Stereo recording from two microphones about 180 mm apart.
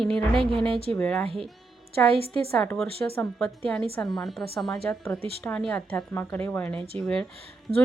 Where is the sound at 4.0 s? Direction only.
Centre (ahead or behind).